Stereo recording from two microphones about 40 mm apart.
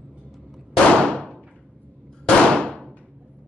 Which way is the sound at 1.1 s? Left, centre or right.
Left.